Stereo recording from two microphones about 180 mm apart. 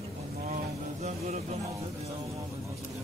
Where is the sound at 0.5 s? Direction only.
40° right (ahead or behind).